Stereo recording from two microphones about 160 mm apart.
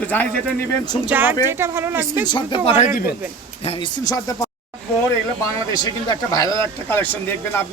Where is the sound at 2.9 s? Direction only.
70° left (ahead or behind).